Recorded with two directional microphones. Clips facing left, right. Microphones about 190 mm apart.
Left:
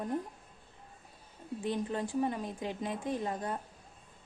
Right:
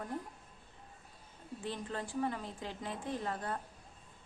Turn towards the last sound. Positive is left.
turn(degrees=15)  # may be behind; listen again after turning